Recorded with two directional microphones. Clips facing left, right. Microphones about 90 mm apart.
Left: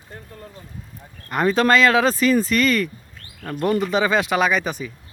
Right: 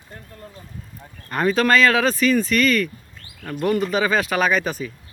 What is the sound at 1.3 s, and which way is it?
Speech, 25° left (ahead or behind).